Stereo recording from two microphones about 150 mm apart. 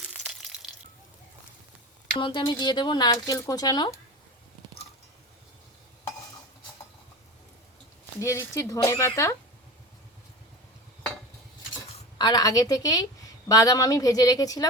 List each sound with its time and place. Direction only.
0.0 s crushing: 5° right (ahead or behind)
2.1 s a woman's voice: 30° left (ahead or behind)
8.2 s a woman's voice: 20° left (ahead or behind)
12.1 s a woman's voice: 30° left (ahead or behind)